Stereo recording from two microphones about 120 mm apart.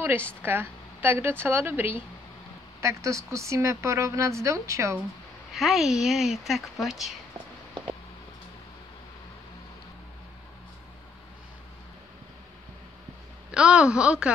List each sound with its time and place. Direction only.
0.4 s speech: 20° right (ahead or behind)
5.5 s speech: centre (ahead or behind)
13.5 s a sound: 10° right (ahead or behind)